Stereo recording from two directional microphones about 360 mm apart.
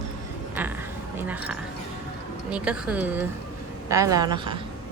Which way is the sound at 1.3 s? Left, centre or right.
Centre.